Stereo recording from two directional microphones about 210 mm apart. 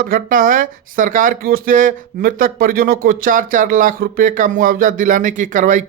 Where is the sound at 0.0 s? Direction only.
40° right (ahead or behind).